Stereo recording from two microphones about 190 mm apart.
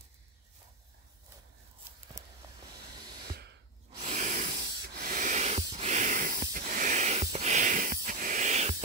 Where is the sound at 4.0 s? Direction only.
40° right (ahead or behind).